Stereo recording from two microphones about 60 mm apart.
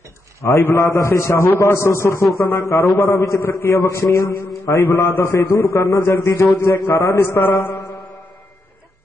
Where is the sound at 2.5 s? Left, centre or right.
Left.